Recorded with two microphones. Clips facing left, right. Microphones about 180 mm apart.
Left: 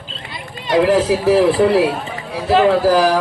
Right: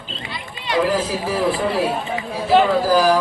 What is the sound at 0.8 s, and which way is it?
Speech, 70° left (ahead or behind).